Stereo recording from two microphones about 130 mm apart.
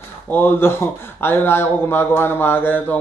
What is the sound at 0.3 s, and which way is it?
Speech, 15° left (ahead or behind).